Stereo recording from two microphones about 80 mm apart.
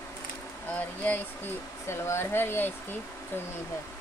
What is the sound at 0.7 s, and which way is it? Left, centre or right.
Speech, left.